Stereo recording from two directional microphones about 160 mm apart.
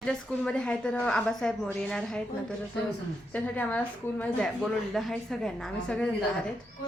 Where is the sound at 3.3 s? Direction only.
10° left (ahead or behind).